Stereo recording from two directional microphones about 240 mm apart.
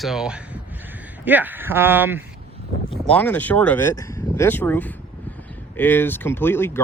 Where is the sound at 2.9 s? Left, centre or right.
Centre.